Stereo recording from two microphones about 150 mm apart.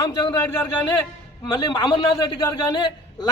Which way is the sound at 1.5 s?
30° left (ahead or behind).